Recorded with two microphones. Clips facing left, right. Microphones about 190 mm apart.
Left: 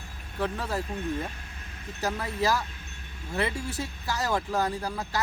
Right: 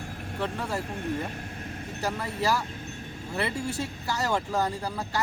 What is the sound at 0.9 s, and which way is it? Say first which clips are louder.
Speech: right 1 dB; 55° right (ahead or behind).